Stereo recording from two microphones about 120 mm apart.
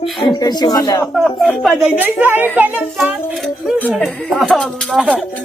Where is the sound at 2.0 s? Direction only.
15° right (ahead or behind).